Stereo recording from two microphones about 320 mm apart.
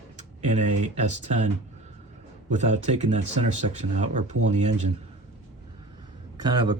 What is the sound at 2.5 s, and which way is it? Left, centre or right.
Speech, right.